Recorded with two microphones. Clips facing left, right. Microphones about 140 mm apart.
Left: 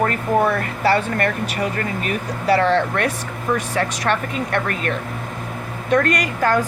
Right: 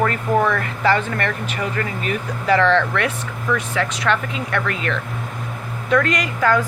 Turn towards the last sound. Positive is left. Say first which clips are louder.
# even
turn(degrees=40)  # may be behind; listen again after turning